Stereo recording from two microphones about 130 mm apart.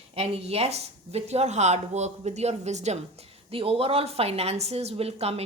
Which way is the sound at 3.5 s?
50° right (ahead or behind).